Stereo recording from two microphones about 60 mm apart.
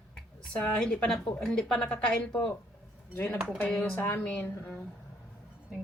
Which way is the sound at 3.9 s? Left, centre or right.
Left.